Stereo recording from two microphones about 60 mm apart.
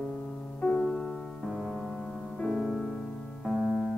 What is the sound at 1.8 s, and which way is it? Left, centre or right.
Music, centre.